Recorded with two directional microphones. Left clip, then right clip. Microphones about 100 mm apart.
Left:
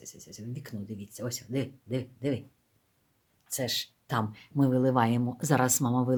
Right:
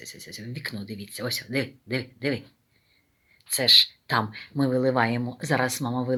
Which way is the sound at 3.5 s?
15° left (ahead or behind).